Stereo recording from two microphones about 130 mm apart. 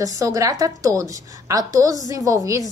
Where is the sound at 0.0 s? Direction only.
25° right (ahead or behind).